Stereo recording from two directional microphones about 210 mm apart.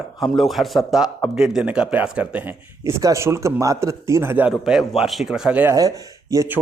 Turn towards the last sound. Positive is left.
turn(degrees=-15)  # may be behind; listen again after turning